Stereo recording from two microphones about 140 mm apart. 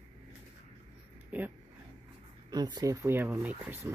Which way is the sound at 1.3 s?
10° right (ahead or behind).